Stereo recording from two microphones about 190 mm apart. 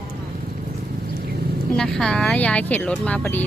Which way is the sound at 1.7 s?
5° left (ahead or behind).